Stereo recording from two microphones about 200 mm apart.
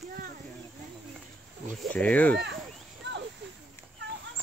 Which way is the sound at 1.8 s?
5° left (ahead or behind).